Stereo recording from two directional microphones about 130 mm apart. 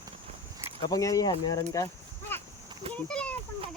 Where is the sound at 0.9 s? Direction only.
25° left (ahead or behind).